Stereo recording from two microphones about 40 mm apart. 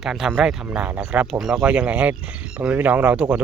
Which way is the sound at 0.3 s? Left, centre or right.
Right.